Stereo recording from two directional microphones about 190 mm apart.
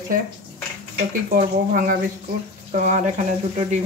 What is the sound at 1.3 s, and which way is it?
Speech, 45° right (ahead or behind).